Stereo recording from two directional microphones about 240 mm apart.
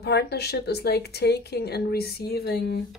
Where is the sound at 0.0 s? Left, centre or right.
Left.